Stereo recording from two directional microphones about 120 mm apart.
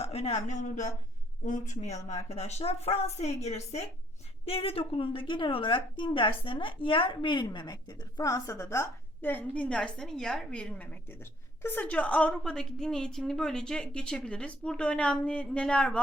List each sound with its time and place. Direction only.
0.0 s a woman's voice: 60° left (ahead or behind)
4.4 s a woman's voice: 55° left (ahead or behind); by 16.0 s 5° left (ahead or behind)